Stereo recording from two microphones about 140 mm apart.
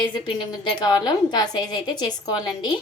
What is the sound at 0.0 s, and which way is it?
A woman's voice, 35° left (ahead or behind).